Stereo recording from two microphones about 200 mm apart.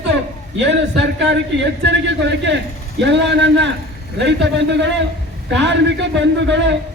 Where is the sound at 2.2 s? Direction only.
60° right (ahead or behind).